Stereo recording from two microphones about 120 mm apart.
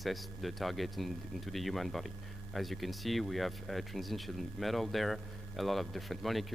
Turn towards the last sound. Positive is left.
turn(degrees=0)  # may be behind; listen again after turning